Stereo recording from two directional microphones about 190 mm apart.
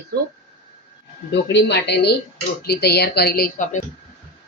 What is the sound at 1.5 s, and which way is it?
Speech, 65° left (ahead or behind).